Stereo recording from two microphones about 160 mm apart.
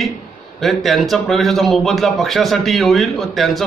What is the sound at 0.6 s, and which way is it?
A man's voice, centre (ahead or behind).